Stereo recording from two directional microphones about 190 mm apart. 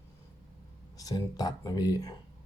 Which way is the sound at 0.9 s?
20° left (ahead or behind).